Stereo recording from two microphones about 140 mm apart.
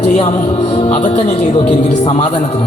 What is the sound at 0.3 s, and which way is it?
A man's voice, 55° left (ahead or behind).